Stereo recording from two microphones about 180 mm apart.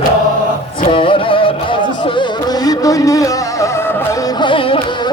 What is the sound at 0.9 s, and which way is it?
Music, 30° left (ahead or behind).